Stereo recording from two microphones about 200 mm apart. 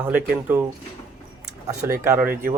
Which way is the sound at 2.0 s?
15° right (ahead or behind).